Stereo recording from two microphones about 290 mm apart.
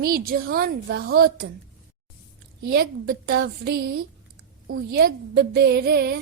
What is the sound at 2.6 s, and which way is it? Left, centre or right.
A woman's voice, right.